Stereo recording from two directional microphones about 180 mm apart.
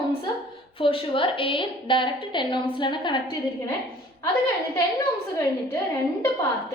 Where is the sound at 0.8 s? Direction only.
30° left (ahead or behind).